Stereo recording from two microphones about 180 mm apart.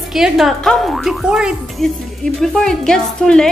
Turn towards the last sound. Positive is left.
turn(degrees=5)  # may be behind; listen again after turning